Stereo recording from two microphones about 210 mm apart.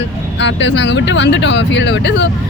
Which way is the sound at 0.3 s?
55° left (ahead or behind).